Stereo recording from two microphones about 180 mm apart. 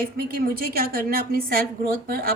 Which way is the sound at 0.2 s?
55° right (ahead or behind).